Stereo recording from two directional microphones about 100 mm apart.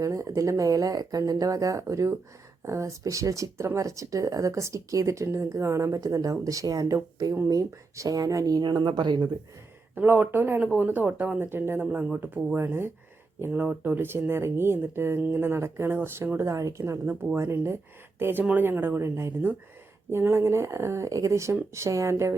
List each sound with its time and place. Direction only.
0.0 s speech: 35° right (ahead or behind)
9.9 s speech: 20° right (ahead or behind)